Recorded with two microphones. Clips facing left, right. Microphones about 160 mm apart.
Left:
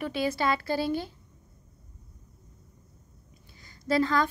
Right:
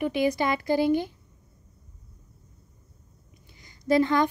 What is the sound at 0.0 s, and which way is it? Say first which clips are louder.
Speech: right 4 dB; 15° right (ahead or behind).